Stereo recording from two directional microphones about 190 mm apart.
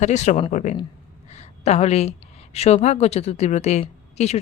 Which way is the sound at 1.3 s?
35° left (ahead or behind).